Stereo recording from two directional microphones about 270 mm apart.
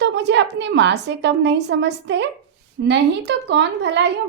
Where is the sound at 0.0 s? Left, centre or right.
Right.